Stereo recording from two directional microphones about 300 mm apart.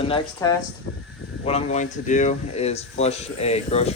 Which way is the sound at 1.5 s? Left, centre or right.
Left.